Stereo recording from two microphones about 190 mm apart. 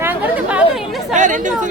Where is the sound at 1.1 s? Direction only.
40° right (ahead or behind).